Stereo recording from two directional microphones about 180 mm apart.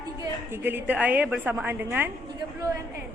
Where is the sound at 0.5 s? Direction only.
10° right (ahead or behind).